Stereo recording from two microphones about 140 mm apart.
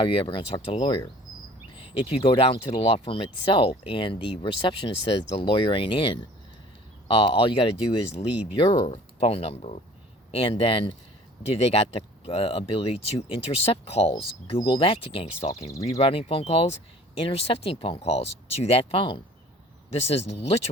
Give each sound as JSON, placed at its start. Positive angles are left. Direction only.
{"t": 0.0, "sound": "speech", "side_deg": 40}
{"t": 14.1, "sound": "speech", "side_deg": 35}